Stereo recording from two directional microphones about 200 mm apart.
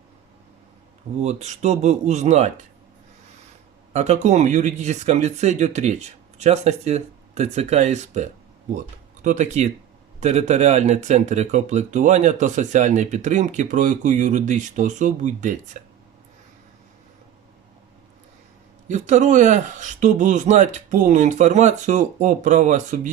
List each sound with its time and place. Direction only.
1.2 s speech: 35° right (ahead or behind)
3.9 s speech: 35° right (ahead or behind)
18.9 s speech: 35° right (ahead or behind)